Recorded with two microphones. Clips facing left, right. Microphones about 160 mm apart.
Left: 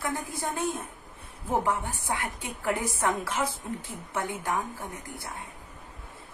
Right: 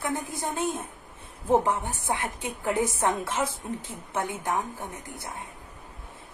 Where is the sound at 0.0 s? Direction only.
20° right (ahead or behind).